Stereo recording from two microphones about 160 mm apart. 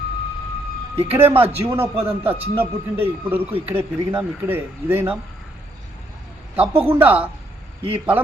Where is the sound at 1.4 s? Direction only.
15° right (ahead or behind).